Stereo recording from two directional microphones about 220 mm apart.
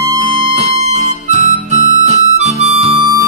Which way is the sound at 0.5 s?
30° right (ahead or behind).